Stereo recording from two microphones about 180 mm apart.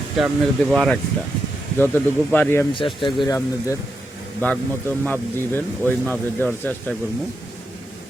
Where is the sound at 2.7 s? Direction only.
30° left (ahead or behind).